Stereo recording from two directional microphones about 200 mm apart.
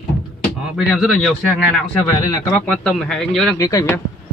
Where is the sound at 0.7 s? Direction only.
Centre (ahead or behind).